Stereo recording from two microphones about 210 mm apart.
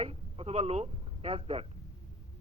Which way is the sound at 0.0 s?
25° right (ahead or behind).